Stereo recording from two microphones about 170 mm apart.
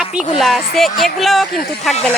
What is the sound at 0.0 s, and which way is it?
Music, 5° right (ahead or behind).